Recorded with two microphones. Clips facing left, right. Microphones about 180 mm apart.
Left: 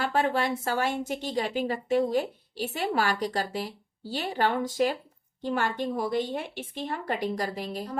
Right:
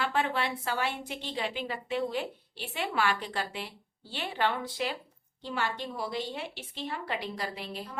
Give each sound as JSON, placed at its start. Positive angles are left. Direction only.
{"t": 0.0, "sound": "a woman's voice", "side_deg": 40}